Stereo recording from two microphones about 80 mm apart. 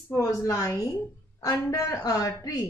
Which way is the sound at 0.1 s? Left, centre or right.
Left.